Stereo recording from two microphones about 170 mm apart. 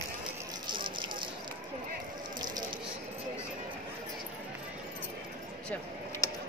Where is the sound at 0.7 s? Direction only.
30° right (ahead or behind).